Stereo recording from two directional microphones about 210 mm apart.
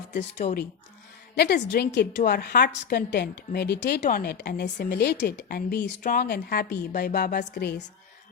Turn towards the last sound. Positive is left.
turn(degrees=55)  # may be behind; listen again after turning